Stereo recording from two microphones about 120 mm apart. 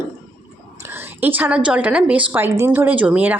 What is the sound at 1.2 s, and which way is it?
A woman's voice, 15° right (ahead or behind).